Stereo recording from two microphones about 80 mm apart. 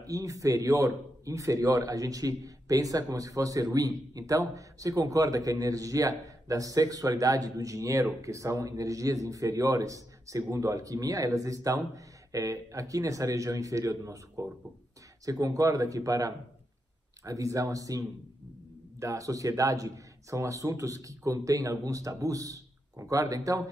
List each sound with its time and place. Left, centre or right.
0.0 s a man's voice: right
15.2 s a man's voice: right